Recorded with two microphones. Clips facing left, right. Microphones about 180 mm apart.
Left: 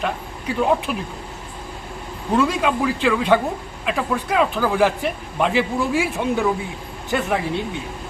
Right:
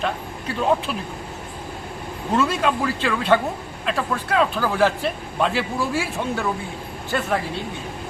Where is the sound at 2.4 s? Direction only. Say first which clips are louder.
Left 2 dB; 10° left (ahead or behind).